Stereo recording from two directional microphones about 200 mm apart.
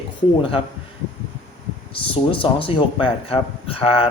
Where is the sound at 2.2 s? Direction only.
25° left (ahead or behind).